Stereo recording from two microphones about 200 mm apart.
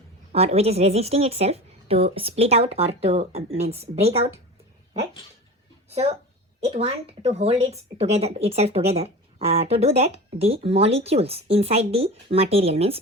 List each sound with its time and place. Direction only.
0.3 s speech: 30° right (ahead or behind)
6.6 s speech: 30° right (ahead or behind)